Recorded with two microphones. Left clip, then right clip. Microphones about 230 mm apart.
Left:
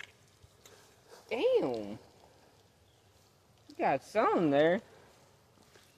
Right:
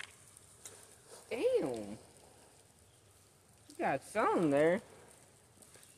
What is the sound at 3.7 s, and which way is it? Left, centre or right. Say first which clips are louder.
Speech: left 4 dB; left.